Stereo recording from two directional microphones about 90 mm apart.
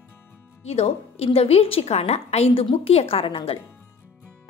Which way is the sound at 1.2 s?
90° left.